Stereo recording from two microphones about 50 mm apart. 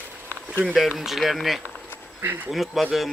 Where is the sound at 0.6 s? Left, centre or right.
Centre.